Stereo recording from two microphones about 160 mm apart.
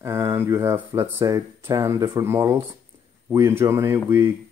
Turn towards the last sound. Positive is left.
turn(degrees=-15)  # may be behind; listen again after turning